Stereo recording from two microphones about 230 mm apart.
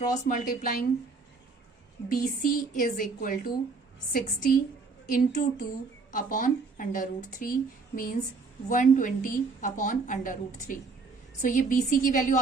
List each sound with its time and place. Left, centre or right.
0.3 s a woman's voice: left
2.0 s a woman's voice: left